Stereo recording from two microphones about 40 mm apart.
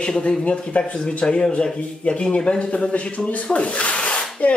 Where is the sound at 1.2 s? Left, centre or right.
Centre.